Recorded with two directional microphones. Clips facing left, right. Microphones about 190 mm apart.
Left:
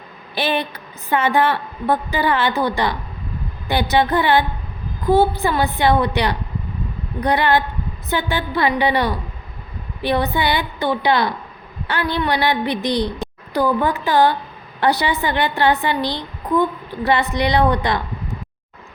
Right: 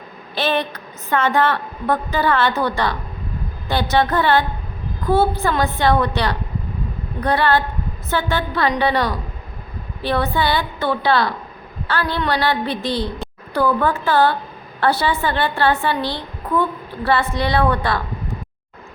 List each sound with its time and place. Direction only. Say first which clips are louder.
0.3 s a woman's voice: right 1 dB; 15° left (ahead or behind)